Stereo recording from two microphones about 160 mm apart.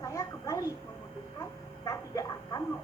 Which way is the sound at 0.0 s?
20° left (ahead or behind).